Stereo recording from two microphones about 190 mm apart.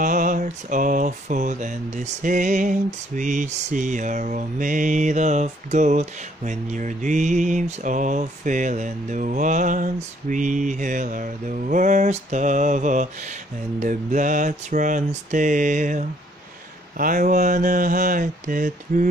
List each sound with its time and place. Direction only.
0.0 s mantra: 45° right (ahead or behind)